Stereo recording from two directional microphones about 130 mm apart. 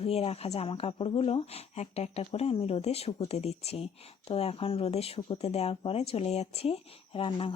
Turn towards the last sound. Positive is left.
turn(degrees=45)  # may be behind; listen again after turning